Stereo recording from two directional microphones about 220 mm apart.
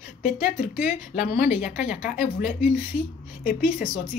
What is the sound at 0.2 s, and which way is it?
Speech, 40° left (ahead or behind).